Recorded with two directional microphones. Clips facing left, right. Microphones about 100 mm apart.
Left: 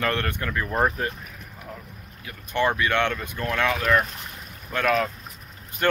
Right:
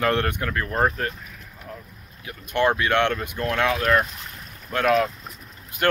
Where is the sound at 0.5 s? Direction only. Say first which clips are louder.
Left 2 dB; 5° left (ahead or behind).